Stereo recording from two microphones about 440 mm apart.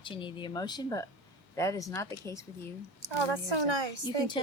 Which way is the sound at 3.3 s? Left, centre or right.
Right.